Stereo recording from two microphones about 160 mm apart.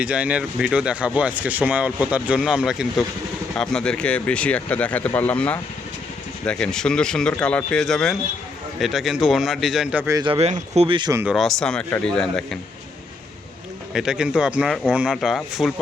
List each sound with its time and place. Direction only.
0.0 s speech: 10° right (ahead or behind)
10.2 s speech: 35° right (ahead or behind)
11.1 s speech: 15° right (ahead or behind)
11.3 s speech: 5° left (ahead or behind)
13.9 s speech: 5° right (ahead or behind)